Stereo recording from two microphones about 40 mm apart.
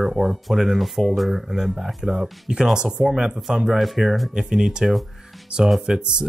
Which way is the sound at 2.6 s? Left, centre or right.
Right.